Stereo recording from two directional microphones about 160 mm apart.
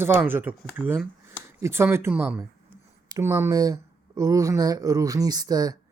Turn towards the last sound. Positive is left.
turn(degrees=-25)  # may be behind; listen again after turning